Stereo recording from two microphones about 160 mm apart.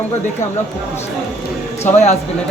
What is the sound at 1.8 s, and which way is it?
Speech, 45° left (ahead or behind).